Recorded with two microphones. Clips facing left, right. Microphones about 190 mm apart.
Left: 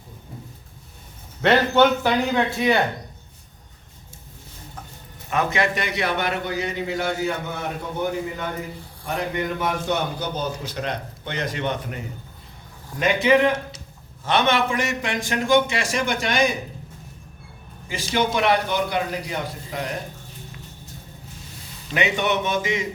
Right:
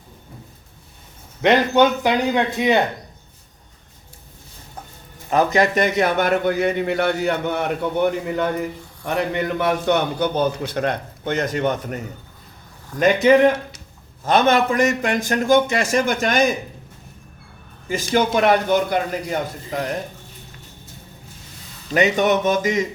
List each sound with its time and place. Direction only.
1.4 s a man's voice: 15° right (ahead or behind)
5.3 s a man's voice: 35° right (ahead or behind)
13.0 s a man's voice: 45° right (ahead or behind)
17.8 s a man's voice: 45° right (ahead or behind)
21.9 s a man's voice: 40° right (ahead or behind)